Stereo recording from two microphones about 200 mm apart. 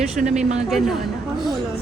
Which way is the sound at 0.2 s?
45° right (ahead or behind).